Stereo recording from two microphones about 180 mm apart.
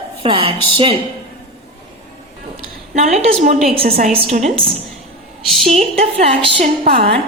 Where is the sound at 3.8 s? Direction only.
55° right (ahead or behind).